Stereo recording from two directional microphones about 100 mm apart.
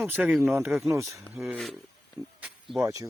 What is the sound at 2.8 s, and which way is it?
Speech, 35° right (ahead or behind).